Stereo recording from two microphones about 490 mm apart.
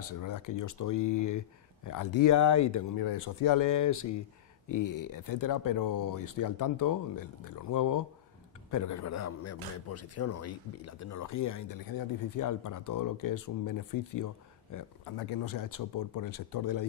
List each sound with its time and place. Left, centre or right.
0.2 s speech: left
15.4 s speech: left